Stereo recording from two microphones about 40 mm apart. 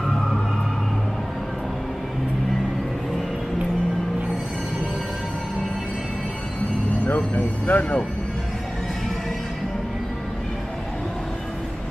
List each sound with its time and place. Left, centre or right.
7.3 s speech: left